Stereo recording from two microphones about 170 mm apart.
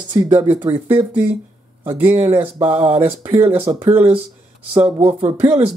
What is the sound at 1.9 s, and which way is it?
Speech, 10° right (ahead or behind).